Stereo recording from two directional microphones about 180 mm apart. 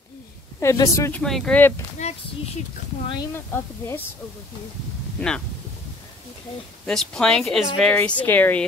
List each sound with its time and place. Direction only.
0.6 s a woman's voice: 15° left (ahead or behind)
1.2 s speech: 5° left (ahead or behind)
2.0 s speech: 35° left (ahead or behind)
3.3 s a woman's voice: 10° left (ahead or behind)
5.2 s a woman's voice: 10° left (ahead or behind)
6.9 s speech: 5° left (ahead or behind)